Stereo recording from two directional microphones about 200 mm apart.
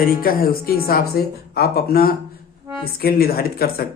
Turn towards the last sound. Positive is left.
turn(degrees=50)  # may be behind; listen again after turning